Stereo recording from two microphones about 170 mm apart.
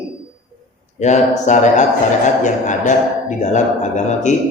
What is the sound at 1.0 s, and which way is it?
A man's voice, 45° left (ahead or behind).